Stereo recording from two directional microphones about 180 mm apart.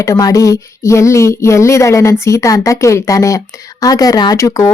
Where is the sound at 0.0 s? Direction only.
20° left (ahead or behind).